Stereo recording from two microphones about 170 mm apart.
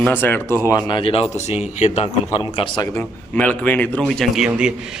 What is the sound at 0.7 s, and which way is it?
Speech, 20° left (ahead or behind).